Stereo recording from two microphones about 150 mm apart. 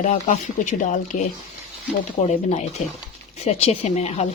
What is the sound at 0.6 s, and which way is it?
Speech, 55° left (ahead or behind).